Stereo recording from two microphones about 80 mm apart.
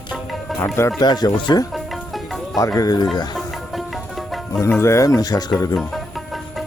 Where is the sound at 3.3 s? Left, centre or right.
Centre.